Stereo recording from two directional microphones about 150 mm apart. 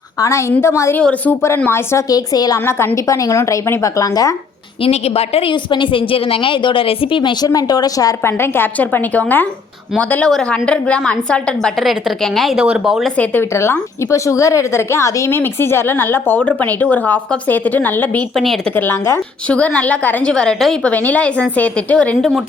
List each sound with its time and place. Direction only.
0.2 s a woman's voice: 20° left (ahead or behind)
4.8 s a woman's voice: 45° left (ahead or behind); by 13.1 s centre (ahead or behind)
13.1 s a woman's voice: 15° left (ahead or behind)